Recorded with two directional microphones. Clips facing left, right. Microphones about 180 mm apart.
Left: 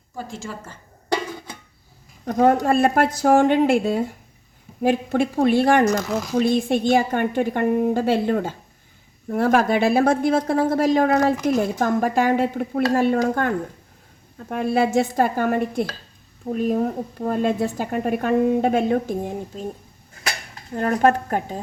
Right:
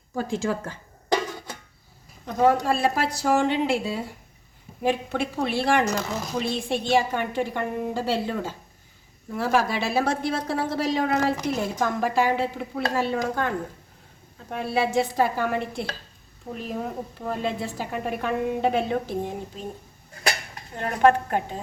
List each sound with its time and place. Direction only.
0.2 s a woman's voice: 75° right (ahead or behind)
2.2 s a woman's voice: 50° left (ahead or behind)
14.5 s a woman's voice: 50° left (ahead or behind)
20.7 s a woman's voice: 40° left (ahead or behind)